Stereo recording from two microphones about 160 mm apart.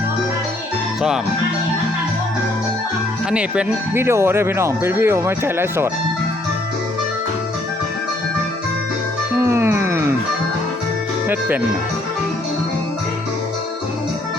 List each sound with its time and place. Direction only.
3.3 s speech: 5° right (ahead or behind)
9.4 s music: 15° right (ahead or behind)
11.3 s speech: 10° right (ahead or behind)